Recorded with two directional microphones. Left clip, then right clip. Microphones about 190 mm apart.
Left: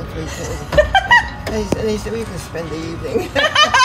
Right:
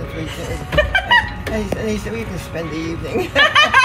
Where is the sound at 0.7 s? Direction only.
20° left (ahead or behind).